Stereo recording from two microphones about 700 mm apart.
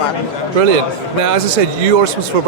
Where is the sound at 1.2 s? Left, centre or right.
Right.